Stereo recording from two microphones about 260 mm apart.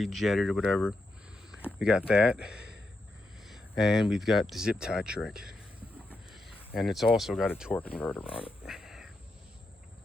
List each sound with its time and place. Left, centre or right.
0.0 s speech: centre
3.4 s a sound: centre
4.1 s speech: centre
6.7 s speech: centre
8.3 s speech: left
8.6 s cat: centre